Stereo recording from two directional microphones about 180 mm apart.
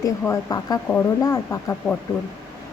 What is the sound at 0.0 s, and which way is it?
A woman's voice, 20° left (ahead or behind).